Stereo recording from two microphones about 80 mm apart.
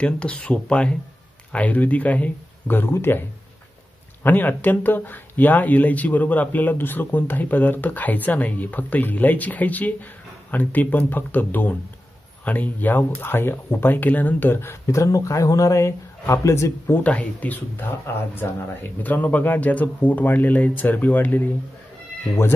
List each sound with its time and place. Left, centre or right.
0.0 s speech: centre; by 17.0 s left
17.0 s speech: centre